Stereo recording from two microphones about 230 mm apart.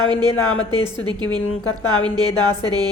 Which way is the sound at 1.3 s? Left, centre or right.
Left.